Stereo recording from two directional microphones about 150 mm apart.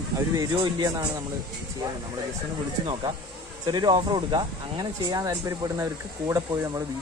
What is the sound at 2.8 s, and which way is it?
Speech, 30° right (ahead or behind).